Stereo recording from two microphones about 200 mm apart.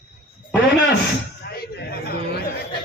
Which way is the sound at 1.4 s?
50° left (ahead or behind).